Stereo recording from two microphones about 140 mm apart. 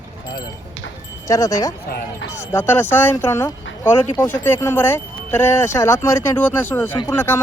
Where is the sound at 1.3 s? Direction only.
20° left (ahead or behind).